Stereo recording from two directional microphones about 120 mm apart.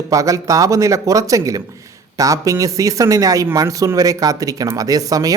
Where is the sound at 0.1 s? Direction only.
30° right (ahead or behind).